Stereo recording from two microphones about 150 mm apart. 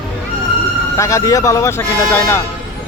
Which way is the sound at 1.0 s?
20° left (ahead or behind).